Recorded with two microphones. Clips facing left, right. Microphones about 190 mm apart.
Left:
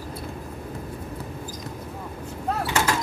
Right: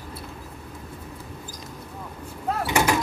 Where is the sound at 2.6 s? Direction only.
15° right (ahead or behind).